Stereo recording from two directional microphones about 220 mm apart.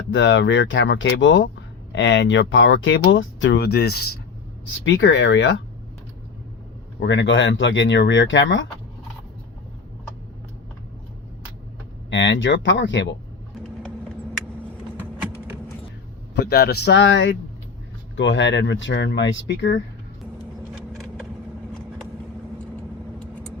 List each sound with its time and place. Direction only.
0.1 s speech: 55° left (ahead or behind)
7.0 s speech: 55° left (ahead or behind)
12.1 s speech: 55° left (ahead or behind)
16.3 s a man's voice: 45° left (ahead or behind)